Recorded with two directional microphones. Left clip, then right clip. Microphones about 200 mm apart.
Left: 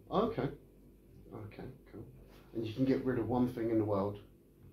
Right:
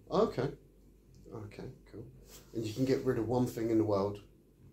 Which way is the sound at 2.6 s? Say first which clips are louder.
Right 1 dB; 35° right (ahead or behind).